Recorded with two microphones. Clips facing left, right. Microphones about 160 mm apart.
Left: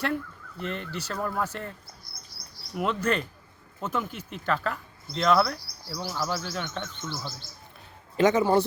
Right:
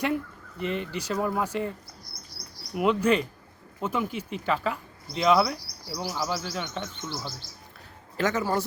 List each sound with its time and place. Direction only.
0.6 s speech: 5° right (ahead or behind)
2.7 s speech: 5° right (ahead or behind)
6.1 s speech: centre (ahead or behind)
8.1 s a man's voice: 20° left (ahead or behind)